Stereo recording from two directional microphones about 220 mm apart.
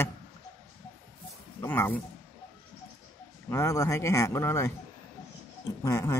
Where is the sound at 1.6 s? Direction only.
10° left (ahead or behind).